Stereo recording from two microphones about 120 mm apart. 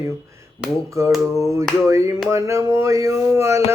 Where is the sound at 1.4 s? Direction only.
25° right (ahead or behind).